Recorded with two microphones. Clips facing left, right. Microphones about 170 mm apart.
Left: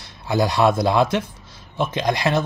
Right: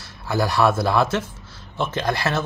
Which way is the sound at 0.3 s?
20° left (ahead or behind).